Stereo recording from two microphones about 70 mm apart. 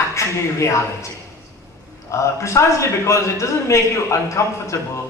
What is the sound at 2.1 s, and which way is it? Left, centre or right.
A man's voice, left.